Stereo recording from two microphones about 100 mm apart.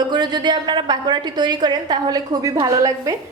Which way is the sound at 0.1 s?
45° right (ahead or behind).